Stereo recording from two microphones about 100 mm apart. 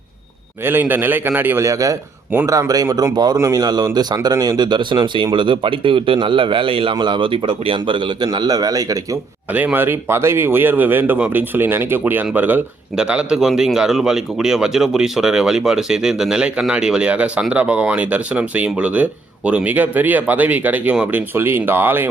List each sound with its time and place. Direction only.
0.6 s speech: 20° right (ahead or behind)
1.6 s speech: 35° right (ahead or behind)
3.3 s speech: 30° right (ahead or behind)
3.6 s speech: 40° right (ahead or behind); by 6.9 s 60° right (ahead or behind)
6.9 s speech: 50° right (ahead or behind)
9.5 s speech: 15° right (ahead or behind)